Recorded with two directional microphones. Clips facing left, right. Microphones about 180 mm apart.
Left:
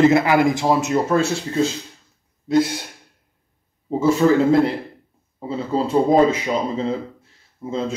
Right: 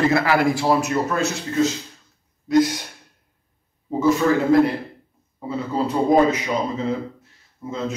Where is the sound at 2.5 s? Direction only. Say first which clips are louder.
Right 1 dB; 25° left (ahead or behind).